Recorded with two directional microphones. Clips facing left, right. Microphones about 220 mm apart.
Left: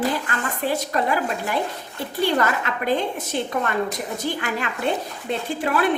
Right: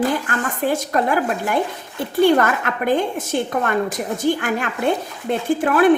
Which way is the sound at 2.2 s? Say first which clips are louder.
Right 6 dB; 50° right (ahead or behind).